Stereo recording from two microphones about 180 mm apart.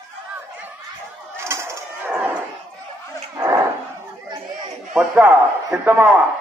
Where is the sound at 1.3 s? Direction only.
15° right (ahead or behind).